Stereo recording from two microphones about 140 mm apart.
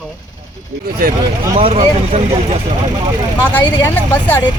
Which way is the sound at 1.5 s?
45° right (ahead or behind).